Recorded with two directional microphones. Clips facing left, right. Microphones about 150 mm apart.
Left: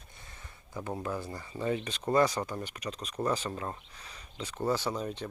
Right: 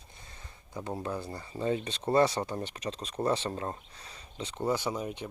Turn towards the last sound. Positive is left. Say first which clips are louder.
# even
turn(degrees=-15)  # may be behind; listen again after turning